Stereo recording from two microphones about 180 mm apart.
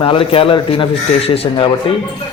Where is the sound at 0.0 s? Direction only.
30° left (ahead or behind).